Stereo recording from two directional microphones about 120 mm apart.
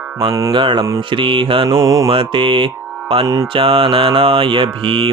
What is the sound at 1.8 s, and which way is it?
Mantra, 25° right (ahead or behind).